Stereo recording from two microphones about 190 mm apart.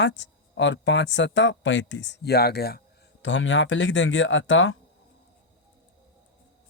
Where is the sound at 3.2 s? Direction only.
85° left.